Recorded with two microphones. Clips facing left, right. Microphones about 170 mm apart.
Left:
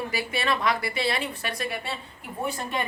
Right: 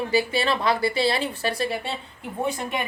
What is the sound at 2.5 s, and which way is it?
Speech, 10° right (ahead or behind).